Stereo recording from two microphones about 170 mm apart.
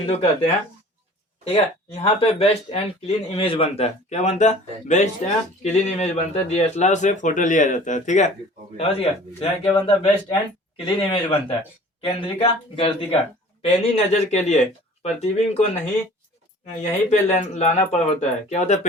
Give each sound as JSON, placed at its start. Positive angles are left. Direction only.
{"t": 0.0, "sound": "speech", "side_deg": 40}
{"t": 1.5, "sound": "speech", "side_deg": 40}
{"t": 10.8, "sound": "speech", "side_deg": 30}
{"t": 16.7, "sound": "speech", "side_deg": 40}